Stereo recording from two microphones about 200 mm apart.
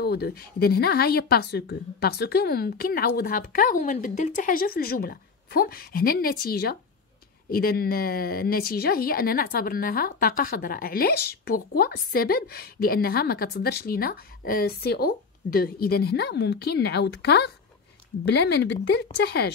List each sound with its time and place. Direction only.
0.0 s a woman's voice: 50° left (ahead or behind)